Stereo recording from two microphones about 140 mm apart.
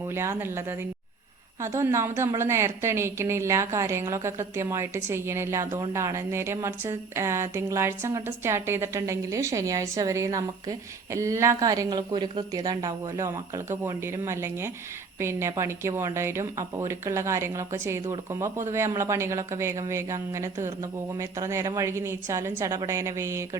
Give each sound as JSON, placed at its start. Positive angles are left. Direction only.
{"t": 0.1, "sound": "a woman's voice", "side_deg": -20}